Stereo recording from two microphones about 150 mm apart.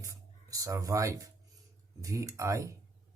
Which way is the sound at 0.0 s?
25° right (ahead or behind).